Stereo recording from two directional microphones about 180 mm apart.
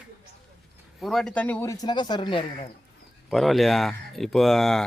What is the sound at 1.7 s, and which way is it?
Speech, 20° left (ahead or behind).